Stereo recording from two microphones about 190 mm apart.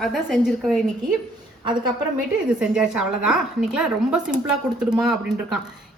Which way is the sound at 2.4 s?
5° right (ahead or behind).